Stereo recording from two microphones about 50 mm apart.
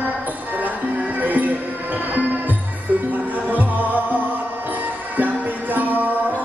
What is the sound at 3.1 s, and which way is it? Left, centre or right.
Music, right.